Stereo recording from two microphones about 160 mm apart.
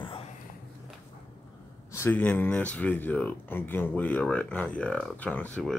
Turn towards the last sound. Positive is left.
turn(degrees=10)  # may be behind; listen again after turning